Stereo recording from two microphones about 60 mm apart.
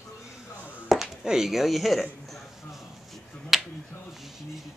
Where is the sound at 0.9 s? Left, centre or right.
Centre.